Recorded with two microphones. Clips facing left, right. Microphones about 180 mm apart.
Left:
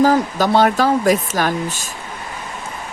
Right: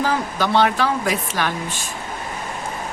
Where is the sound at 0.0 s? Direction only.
40° left (ahead or behind).